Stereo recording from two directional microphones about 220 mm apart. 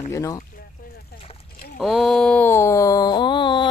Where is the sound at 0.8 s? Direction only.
40° left (ahead or behind).